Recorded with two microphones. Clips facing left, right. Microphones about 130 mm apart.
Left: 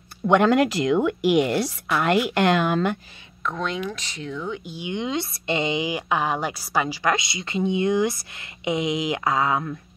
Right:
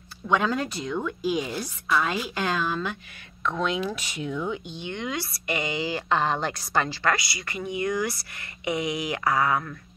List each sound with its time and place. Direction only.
0.3 s speech: 75° left (ahead or behind)
3.4 s speech: 5° right (ahead or behind)
4.6 s a woman's voice: 10° left (ahead or behind)